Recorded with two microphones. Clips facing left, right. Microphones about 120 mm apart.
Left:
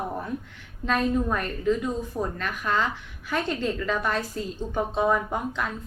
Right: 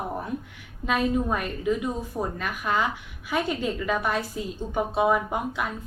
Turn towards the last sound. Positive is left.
turn(degrees=-10)  # may be behind; listen again after turning